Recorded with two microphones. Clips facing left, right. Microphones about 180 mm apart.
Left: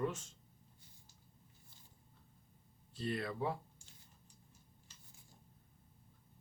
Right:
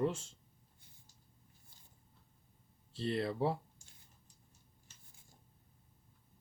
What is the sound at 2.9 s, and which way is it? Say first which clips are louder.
Speech: right 4 dB; 30° right (ahead or behind).